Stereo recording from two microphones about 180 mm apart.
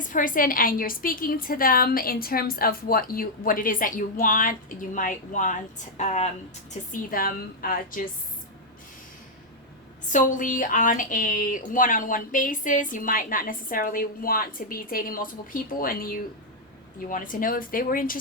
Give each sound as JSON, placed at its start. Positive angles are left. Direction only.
{"t": 0.0, "sound": "a woman's voice", "side_deg": 50}
{"t": 6.9, "sound": "a woman's voice", "side_deg": 55}
{"t": 10.1, "sound": "a woman's voice", "side_deg": 45}